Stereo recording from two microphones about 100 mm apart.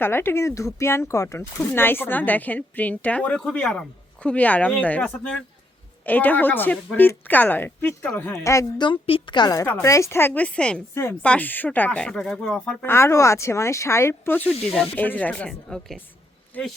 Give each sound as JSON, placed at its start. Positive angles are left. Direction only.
{"t": 0.0, "sound": "a woman's voice", "side_deg": 20}
{"t": 1.5, "sound": "a woman's voice", "side_deg": 20}
{"t": 8.8, "sound": "a woman's voice", "side_deg": 60}
{"t": 9.8, "sound": "a woman's voice", "side_deg": 30}
{"t": 10.9, "sound": "a woman's voice", "side_deg": 25}
{"t": 11.2, "sound": "speech", "side_deg": 15}
{"t": 12.8, "sound": "a woman's voice", "side_deg": 25}
{"t": 15.4, "sound": "a woman's voice", "side_deg": 5}
{"t": 16.5, "sound": "speech", "side_deg": 15}